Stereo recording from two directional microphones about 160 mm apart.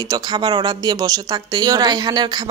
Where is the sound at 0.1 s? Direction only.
25° right (ahead or behind).